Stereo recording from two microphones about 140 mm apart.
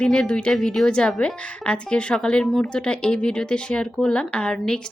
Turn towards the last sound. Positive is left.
turn(degrees=5)  # may be behind; listen again after turning